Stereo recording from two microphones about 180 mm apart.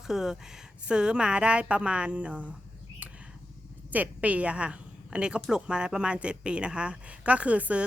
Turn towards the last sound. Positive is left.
turn(degrees=-5)  # may be behind; listen again after turning